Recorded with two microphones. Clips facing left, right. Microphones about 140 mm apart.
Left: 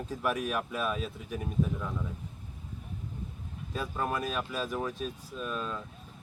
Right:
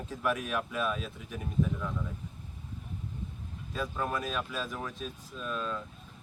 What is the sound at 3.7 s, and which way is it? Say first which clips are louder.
Speech: left 1 dB; 10° left (ahead or behind).